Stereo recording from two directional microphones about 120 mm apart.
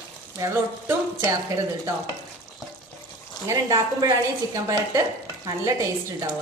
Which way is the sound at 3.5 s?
30° right (ahead or behind).